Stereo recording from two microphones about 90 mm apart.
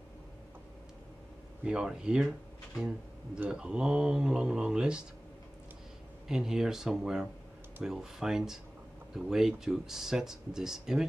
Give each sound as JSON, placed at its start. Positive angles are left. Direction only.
{"t": 1.6, "sound": "speech", "side_deg": -10}
{"t": 3.3, "sound": "speech", "side_deg": -10}
{"t": 6.2, "sound": "speech", "side_deg": -5}